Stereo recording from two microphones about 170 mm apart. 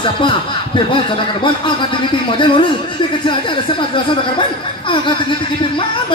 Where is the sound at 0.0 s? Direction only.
30° left (ahead or behind).